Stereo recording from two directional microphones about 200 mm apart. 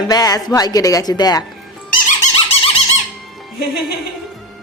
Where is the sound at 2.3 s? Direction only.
30° left (ahead or behind).